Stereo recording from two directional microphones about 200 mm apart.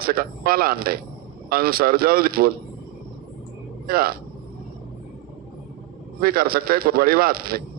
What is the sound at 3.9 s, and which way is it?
Speech, 50° right (ahead or behind).